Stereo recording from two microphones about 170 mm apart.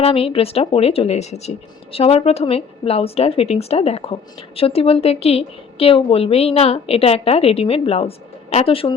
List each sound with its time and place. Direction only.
0.0 s speech: 35° left (ahead or behind)